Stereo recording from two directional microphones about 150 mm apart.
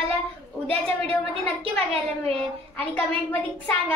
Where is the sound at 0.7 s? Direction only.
40° right (ahead or behind).